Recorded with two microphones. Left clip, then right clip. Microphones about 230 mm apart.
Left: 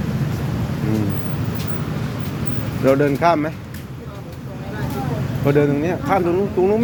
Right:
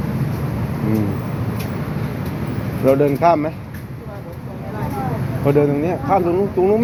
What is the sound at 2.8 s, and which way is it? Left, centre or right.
Speech, centre.